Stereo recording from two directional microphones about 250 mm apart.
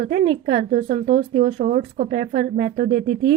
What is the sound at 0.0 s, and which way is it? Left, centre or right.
A woman's voice, right.